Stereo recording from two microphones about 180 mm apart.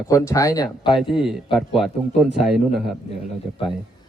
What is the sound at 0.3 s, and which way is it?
Speech, 20° left (ahead or behind).